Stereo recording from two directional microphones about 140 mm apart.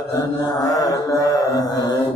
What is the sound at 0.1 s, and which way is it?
Mantra, 25° left (ahead or behind).